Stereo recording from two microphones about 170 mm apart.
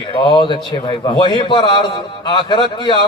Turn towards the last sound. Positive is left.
turn(degrees=30)  # may be behind; listen again after turning